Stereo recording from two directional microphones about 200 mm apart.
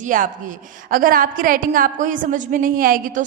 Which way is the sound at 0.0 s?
40° right (ahead or behind).